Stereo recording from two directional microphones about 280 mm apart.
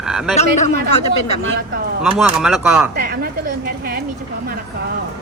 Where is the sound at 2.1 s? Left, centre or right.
Centre.